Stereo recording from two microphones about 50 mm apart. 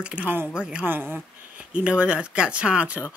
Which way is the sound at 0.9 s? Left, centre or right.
Right.